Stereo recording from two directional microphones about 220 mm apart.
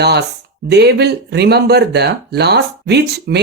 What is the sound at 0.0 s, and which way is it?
Speech, 50° right (ahead or behind).